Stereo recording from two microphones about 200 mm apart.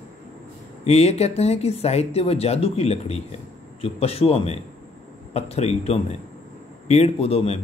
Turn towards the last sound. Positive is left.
turn(degrees=30)  # may be behind; listen again after turning